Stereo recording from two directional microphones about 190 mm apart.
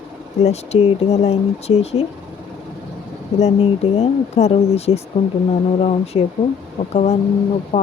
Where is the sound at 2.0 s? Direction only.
30° left (ahead or behind).